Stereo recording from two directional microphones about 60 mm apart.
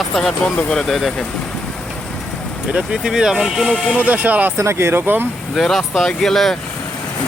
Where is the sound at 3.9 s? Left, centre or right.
Right.